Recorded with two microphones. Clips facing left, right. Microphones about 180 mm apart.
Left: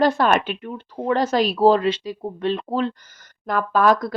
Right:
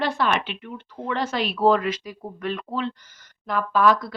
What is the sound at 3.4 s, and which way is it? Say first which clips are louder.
Speech: left 2 dB; 45° left (ahead or behind).